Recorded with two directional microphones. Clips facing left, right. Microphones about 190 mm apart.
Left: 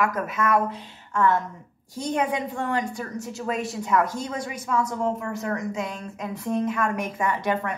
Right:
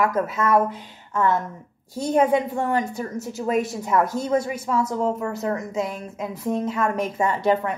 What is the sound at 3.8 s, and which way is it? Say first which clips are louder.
Speech: right 2 dB; 25° right (ahead or behind).